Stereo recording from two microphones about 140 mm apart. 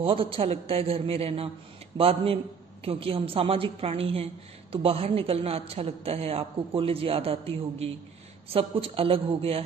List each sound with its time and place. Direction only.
0.0 s a woman's voice: 40° right (ahead or behind)